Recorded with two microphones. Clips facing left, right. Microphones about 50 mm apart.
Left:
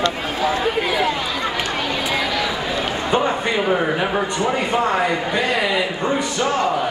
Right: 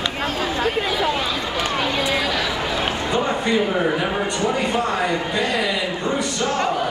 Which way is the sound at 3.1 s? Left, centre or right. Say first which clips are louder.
Left 4 dB; left.